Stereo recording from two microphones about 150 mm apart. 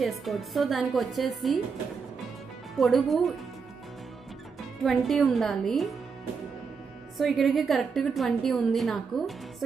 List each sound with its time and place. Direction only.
0.0 s a woman's voice: centre (ahead or behind)
2.8 s a woman's voice: centre (ahead or behind)
4.8 s a woman's voice: centre (ahead or behind)
7.2 s a woman's voice: centre (ahead or behind)